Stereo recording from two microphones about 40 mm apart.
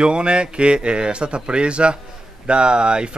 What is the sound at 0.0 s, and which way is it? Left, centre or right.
Speech, right.